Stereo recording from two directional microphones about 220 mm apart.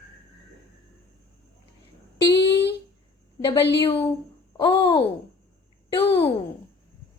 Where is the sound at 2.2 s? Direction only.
50° left (ahead or behind).